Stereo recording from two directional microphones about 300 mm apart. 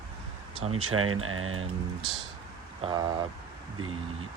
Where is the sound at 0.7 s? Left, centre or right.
Right.